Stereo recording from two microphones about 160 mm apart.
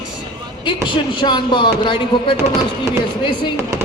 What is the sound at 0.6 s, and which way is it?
Speech, 30° left (ahead or behind).